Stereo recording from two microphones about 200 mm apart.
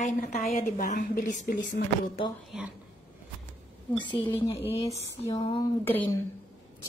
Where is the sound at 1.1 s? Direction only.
50° left (ahead or behind).